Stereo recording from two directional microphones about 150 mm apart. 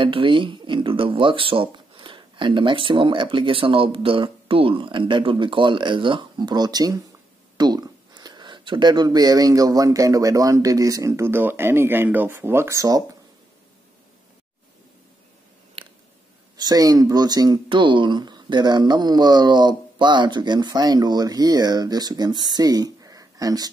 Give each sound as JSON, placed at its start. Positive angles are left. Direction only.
{"t": 0.0, "sound": "speech", "side_deg": -35}
{"t": 15.8, "sound": "chewing", "side_deg": -40}
{"t": 16.5, "sound": "speech", "side_deg": -25}